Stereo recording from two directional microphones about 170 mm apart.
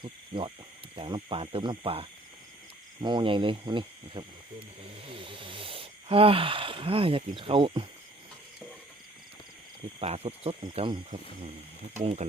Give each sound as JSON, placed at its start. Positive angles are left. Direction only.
{"t": 0.0, "sound": "cricket", "side_deg": -30}
{"t": 0.9, "sound": "speech", "side_deg": -30}
{"t": 10.0, "sound": "speech", "side_deg": -35}